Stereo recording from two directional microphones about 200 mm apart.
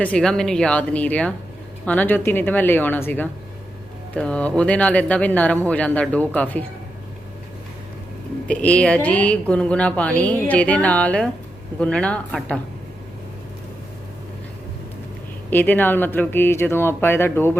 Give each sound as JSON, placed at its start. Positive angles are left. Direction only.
{"t": 0.0, "sound": "a woman's voice", "side_deg": 5}
{"t": 8.4, "sound": "a woman's voice", "side_deg": 5}
{"t": 15.4, "sound": "a woman's voice", "side_deg": 10}